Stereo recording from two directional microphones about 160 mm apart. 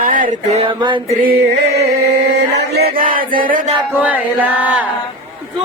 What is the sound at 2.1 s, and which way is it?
Chant, 90° right.